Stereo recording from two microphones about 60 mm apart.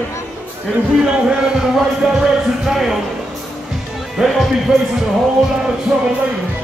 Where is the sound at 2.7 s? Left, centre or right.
Centre.